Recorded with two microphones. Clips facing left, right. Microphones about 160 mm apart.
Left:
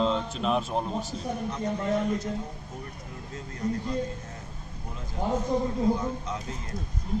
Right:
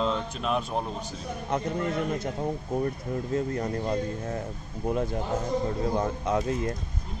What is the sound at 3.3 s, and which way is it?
Speech, 60° right (ahead or behind).